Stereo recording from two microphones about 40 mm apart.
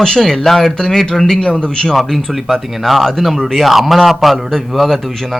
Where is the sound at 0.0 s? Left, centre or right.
Centre.